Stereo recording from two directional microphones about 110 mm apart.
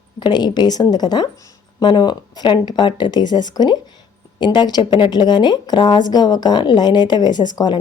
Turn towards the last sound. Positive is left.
turn(degrees=40)  # may be behind; listen again after turning